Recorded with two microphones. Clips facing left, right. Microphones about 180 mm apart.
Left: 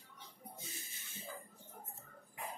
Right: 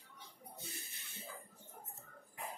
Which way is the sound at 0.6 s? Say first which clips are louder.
Right 1 dB; 60° right (ahead or behind).